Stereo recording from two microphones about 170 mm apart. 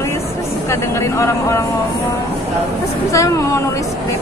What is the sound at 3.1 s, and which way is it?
Speech, 20° left (ahead or behind).